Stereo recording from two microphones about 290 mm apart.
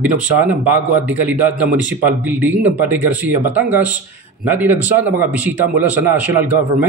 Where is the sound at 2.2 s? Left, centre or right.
Centre.